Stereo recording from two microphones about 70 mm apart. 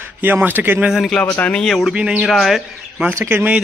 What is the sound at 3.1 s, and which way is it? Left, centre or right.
Speech, right.